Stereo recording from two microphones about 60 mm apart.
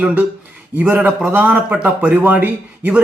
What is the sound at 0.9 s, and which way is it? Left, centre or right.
A man's voice, right.